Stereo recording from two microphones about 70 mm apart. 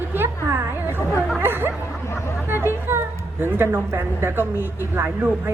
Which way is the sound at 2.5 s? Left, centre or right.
Right.